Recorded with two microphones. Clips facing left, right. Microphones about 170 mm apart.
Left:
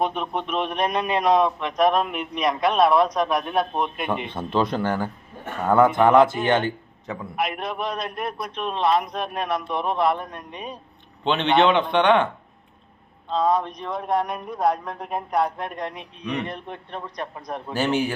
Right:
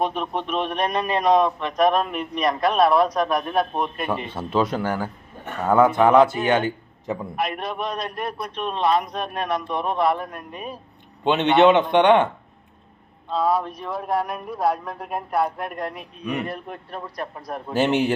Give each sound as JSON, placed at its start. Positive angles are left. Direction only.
{"t": 0.0, "sound": "speech", "side_deg": 0}
{"t": 7.3, "sound": "speech", "side_deg": 0}
{"t": 11.2, "sound": "a man's voice", "side_deg": -15}
{"t": 13.3, "sound": "speech", "side_deg": -5}
{"t": 17.7, "sound": "speech", "side_deg": -20}